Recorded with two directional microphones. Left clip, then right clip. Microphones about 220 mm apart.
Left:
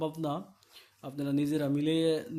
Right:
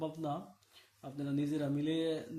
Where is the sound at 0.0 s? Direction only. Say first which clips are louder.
Left 5 dB; 40° left (ahead or behind).